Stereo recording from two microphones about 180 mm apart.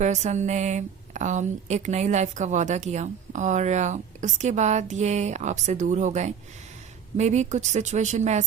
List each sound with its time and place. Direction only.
0.0 s speech: 40° right (ahead or behind)